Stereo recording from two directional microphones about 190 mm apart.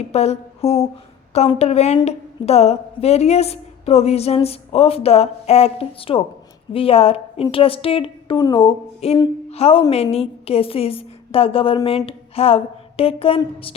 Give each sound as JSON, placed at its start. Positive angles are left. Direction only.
{"t": 0.0, "sound": "a woman's voice", "side_deg": 35}